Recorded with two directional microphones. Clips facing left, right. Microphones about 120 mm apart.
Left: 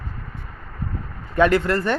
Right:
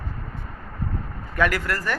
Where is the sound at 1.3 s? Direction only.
25° left (ahead or behind).